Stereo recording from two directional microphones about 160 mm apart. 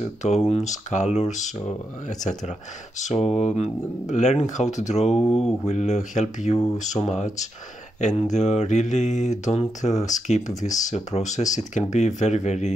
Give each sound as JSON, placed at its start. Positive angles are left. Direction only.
{"t": 0.0, "sound": "speech", "side_deg": 45}
{"t": 5.1, "sound": "a sound", "side_deg": 5}
{"t": 5.7, "sound": "speech", "side_deg": 45}